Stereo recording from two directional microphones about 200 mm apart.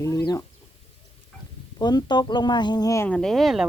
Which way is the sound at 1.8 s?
20° left (ahead or behind).